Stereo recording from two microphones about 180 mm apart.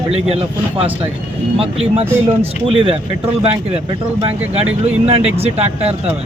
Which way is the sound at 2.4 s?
30° right (ahead or behind).